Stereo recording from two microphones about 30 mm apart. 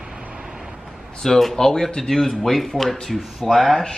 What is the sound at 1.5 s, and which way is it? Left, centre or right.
Speech, left.